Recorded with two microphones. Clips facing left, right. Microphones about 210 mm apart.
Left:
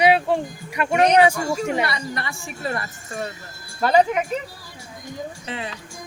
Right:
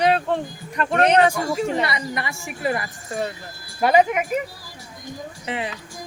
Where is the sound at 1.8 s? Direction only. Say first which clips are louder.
Right 1 dB; 20° right (ahead or behind).